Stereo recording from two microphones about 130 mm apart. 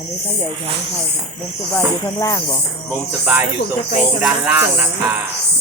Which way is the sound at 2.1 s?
25° left (ahead or behind).